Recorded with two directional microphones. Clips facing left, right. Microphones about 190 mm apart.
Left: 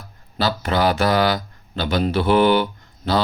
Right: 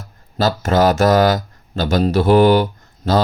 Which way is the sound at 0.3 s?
45° right (ahead or behind).